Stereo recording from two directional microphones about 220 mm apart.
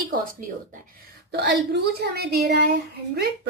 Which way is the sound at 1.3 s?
50° right (ahead or behind).